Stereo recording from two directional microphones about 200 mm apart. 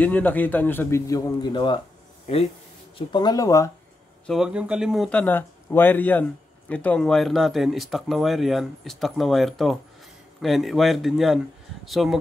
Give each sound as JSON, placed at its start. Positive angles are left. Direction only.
{"t": 0.0, "sound": "a man's voice", "side_deg": 10}
{"t": 3.0, "sound": "speech", "side_deg": 20}
{"t": 4.3, "sound": "speech", "side_deg": -5}